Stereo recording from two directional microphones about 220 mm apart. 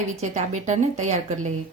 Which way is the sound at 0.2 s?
35° right (ahead or behind).